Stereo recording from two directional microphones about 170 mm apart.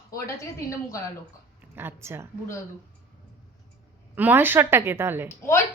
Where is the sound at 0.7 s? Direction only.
20° left (ahead or behind).